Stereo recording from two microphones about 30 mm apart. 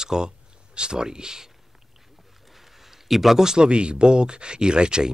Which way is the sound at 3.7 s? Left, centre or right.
Right.